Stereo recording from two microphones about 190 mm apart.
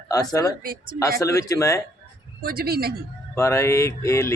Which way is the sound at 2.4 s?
55° right (ahead or behind).